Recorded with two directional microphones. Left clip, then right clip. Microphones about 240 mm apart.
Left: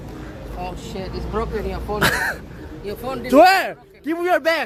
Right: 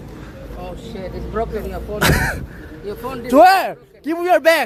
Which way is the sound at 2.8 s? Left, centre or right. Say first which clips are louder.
Right 1 dB; left.